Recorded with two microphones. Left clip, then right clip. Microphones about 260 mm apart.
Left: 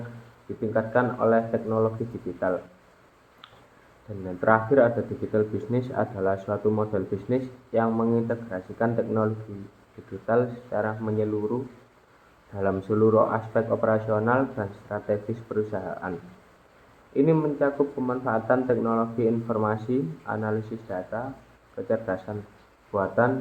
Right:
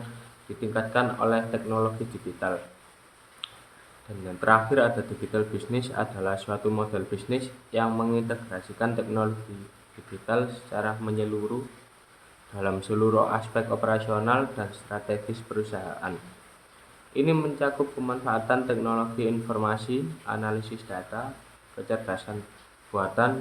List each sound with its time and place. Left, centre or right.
0.7 s speech: right
3.4 s a sound: right
4.4 s speech: right
12.5 s speech: right
17.2 s speech: right